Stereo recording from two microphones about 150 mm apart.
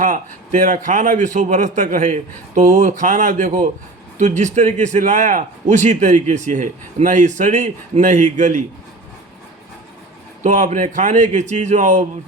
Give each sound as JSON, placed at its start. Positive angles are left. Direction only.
{"t": 0.0, "sound": "a man's voice", "side_deg": -60}
{"t": 10.4, "sound": "a man's voice", "side_deg": -55}